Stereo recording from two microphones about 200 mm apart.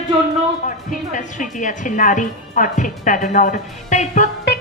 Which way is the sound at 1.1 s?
40° left (ahead or behind).